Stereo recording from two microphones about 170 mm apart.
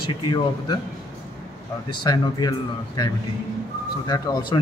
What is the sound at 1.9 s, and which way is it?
Speech, 25° left (ahead or behind).